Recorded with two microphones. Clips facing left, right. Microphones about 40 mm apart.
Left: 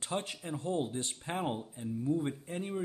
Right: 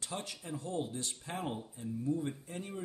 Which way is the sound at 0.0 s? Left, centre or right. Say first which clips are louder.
Left 5 dB; left.